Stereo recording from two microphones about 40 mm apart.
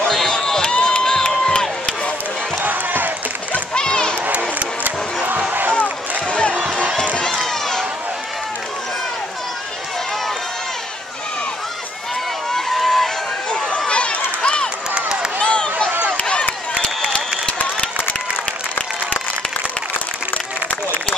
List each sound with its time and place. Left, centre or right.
0.0 s run: centre
0.6 s crowd: left
1.0 s crowd: centre
2.6 s crowd: right
3.7 s a sound: left
4.3 s crowd: right
6.3 s a sound: left
12.5 s run: centre
13.8 s run: left
15.3 s a sound: left